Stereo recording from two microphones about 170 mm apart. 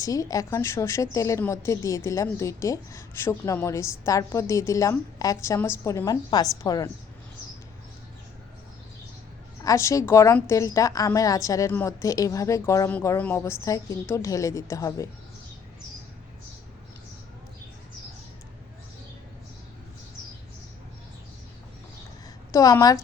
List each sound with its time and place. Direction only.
0.0 s a woman's voice: 20° left (ahead or behind)
9.6 s a woman's voice: 20° left (ahead or behind)
22.5 s a woman's voice: 20° left (ahead or behind)